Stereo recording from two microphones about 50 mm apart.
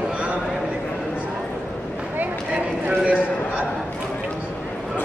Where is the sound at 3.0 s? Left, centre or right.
Right.